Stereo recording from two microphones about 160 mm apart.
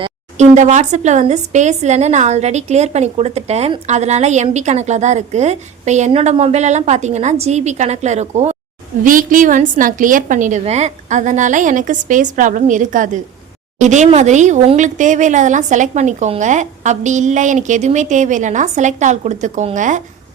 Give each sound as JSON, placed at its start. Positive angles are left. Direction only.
{"t": 0.3, "sound": "speech", "side_deg": -50}
{"t": 9.0, "sound": "speech", "side_deg": -55}